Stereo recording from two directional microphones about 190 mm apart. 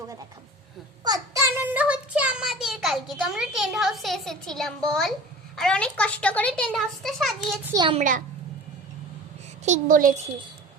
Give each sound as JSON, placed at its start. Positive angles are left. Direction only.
{"t": 1.0, "sound": "child singing", "side_deg": -20}
{"t": 5.5, "sound": "a child's voice", "side_deg": 5}
{"t": 7.7, "sound": "a child's voice", "side_deg": -20}
{"t": 7.9, "sound": "a child's voice", "side_deg": -45}
{"t": 9.6, "sound": "a child's voice", "side_deg": -40}